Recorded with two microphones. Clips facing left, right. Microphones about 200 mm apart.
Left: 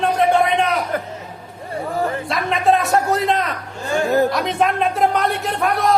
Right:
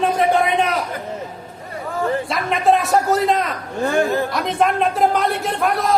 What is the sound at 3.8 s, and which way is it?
Speech, 55° right (ahead or behind).